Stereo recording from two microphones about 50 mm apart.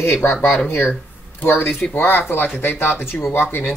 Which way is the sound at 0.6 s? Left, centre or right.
Left.